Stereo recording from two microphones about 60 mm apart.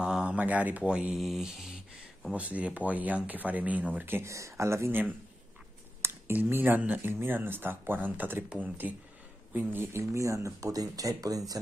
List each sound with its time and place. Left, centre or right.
0.0 s a sound: centre
1.1 s speech: centre
2.3 s speech: right
4.3 s speech: right
6.0 s a sound: right
6.5 s speech: right
8.5 s speech: centre
9.5 s speech: right
9.9 s speech: right